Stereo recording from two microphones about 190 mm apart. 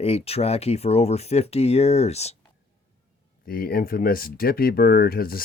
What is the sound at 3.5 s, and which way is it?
Speech, 50° left (ahead or behind).